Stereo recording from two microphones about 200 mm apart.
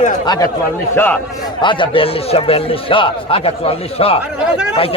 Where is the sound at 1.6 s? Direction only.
25° left (ahead or behind).